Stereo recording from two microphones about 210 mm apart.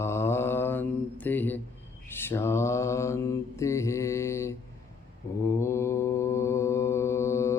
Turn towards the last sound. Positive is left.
turn(degrees=15)  # may be behind; listen again after turning